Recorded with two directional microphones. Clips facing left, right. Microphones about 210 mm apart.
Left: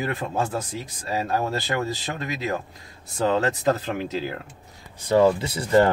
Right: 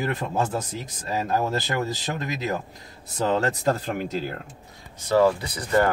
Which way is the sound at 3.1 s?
Centre (ahead or behind).